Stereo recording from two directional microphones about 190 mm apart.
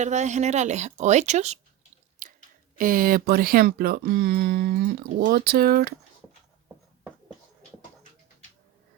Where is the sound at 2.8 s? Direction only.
45° right (ahead or behind).